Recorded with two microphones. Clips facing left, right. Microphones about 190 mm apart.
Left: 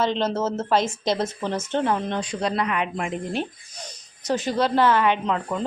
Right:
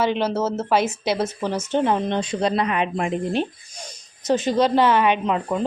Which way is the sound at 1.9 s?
20° right (ahead or behind).